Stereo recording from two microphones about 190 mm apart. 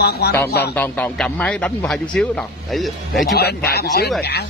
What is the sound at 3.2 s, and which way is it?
Speech, 60° left (ahead or behind).